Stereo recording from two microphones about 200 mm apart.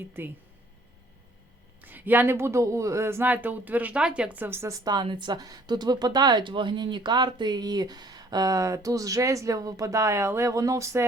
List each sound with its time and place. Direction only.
0.0 s speech: 10° right (ahead or behind)
1.8 s speech: 10° right (ahead or behind)